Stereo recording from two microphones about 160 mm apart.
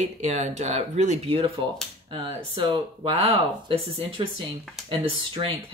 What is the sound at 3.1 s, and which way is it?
Speech, 35° right (ahead or behind).